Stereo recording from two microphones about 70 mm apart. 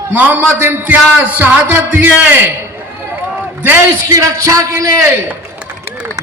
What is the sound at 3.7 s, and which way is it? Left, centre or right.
A man's voice, right.